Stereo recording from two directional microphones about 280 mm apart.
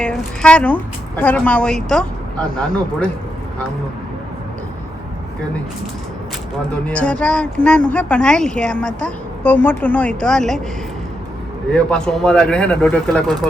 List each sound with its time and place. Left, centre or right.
0.0 s a woman's voice: centre
6.8 s a woman's voice: centre
11.7 s a woman's voice: centre